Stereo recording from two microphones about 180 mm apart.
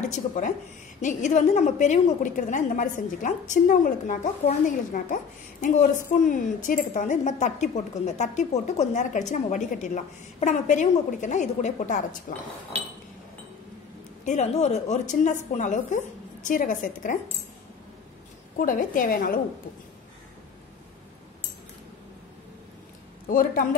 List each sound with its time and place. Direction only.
0.0 s a woman's voice: 40° left (ahead or behind)
14.2 s a woman's voice: 40° left (ahead or behind)
18.6 s a woman's voice: 50° left (ahead or behind)
23.2 s a woman's voice: 50° left (ahead or behind)